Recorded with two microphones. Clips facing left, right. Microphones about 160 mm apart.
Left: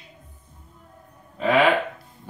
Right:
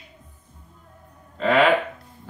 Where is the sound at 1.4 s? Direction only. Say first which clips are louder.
Right 1 dB; 10° left (ahead or behind).